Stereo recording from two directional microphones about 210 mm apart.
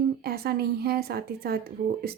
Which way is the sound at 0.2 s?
45° right (ahead or behind).